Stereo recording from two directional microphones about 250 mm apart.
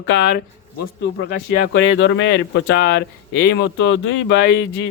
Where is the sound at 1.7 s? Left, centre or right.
Left.